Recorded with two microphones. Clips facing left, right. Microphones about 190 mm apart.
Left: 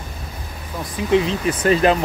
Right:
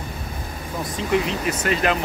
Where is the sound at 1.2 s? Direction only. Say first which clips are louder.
Left 5 dB; 35° left (ahead or behind).